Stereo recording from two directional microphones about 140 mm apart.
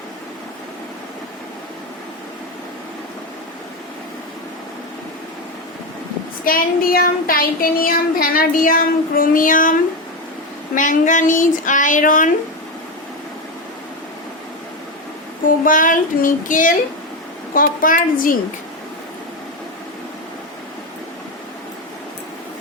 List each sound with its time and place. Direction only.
6.4 s speech: 90° left; by 9.7 s 70° left (ahead or behind)
10.8 s speech: 65° left (ahead or behind)
15.4 s a woman's voice: 75° left (ahead or behind)